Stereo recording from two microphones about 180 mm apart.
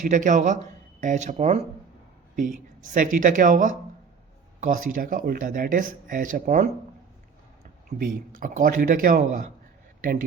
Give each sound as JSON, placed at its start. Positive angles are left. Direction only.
{"t": 0.0, "sound": "speech", "side_deg": -45}
{"t": 7.9, "sound": "a man's voice", "side_deg": -50}